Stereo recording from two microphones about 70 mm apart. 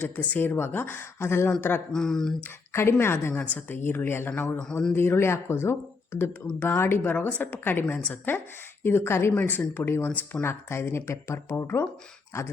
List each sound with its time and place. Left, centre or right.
0.0 s speech: left
1.9 s speech: centre
2.7 s speech: left
3.3 s speech: left
4.5 s speech: centre
4.9 s speech: left
9.3 s speech: left
10.1 s speech: centre
10.4 s speech: left